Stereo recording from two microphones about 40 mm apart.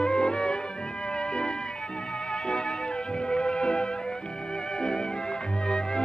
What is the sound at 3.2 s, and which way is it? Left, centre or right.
Music, left.